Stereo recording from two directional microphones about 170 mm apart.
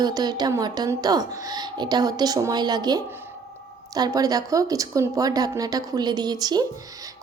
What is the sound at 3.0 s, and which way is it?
Speech, 15° right (ahead or behind).